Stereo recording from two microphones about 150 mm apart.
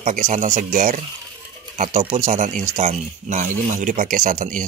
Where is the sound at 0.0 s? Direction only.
60° right (ahead or behind).